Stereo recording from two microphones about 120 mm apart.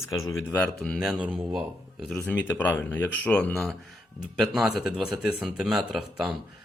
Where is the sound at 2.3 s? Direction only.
15° left (ahead or behind).